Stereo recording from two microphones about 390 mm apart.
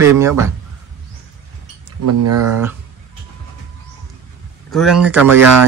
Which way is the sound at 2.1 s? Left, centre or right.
Right.